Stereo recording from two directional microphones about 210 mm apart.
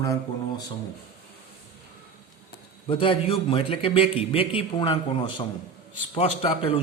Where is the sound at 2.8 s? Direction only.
25° left (ahead or behind).